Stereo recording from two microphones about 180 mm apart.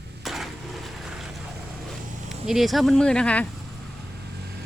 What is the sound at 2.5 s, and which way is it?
Speech, centre (ahead or behind).